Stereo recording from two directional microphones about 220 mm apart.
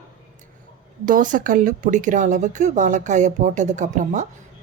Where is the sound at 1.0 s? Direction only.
35° right (ahead or behind).